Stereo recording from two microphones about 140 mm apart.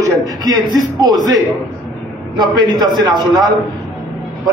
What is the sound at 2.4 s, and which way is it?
Speech, 30° right (ahead or behind).